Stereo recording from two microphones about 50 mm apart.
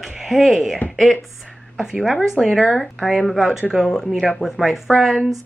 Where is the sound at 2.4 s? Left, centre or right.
Centre.